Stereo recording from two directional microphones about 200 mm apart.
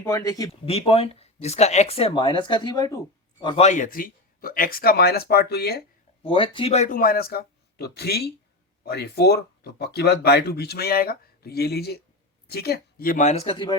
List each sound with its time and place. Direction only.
0.0 s speech: 15° left (ahead or behind)
0.7 s speech: 30° left (ahead or behind)
3.4 s speech: 30° left (ahead or behind); by 5.8 s 50° left (ahead or behind)
6.2 s speech: 25° left (ahead or behind)